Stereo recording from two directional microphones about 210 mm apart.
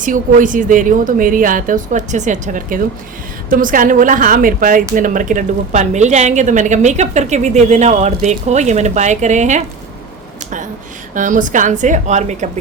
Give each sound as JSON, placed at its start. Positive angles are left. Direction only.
{"t": 0.0, "sound": "a woman's voice", "side_deg": -40}
{"t": 11.1, "sound": "a woman's voice", "side_deg": -40}